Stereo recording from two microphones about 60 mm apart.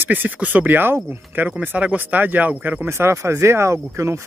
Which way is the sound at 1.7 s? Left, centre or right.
Right.